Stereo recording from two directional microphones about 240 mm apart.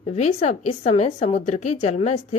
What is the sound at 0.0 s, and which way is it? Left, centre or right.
A woman's voice, left.